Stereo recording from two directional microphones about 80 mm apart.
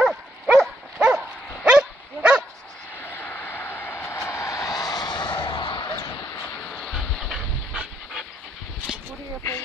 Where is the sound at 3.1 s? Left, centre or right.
Left.